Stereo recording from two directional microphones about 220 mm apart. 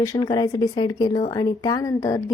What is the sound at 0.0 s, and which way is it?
Speech, 15° left (ahead or behind).